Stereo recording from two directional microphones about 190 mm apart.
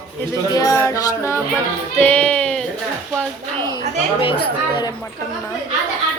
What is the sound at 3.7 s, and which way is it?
Speech, 25° left (ahead or behind).